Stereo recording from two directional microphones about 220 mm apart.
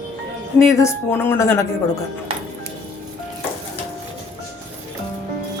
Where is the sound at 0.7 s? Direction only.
10° left (ahead or behind).